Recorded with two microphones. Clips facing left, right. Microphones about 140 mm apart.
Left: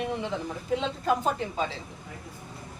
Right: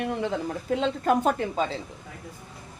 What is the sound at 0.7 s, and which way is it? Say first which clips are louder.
Speech: right 3 dB; 55° right (ahead or behind).